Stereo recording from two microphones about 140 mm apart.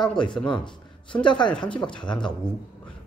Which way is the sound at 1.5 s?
5° left (ahead or behind).